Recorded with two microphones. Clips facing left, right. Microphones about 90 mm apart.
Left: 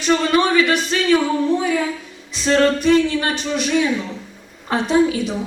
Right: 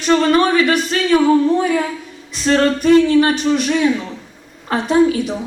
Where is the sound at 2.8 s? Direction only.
45° right (ahead or behind).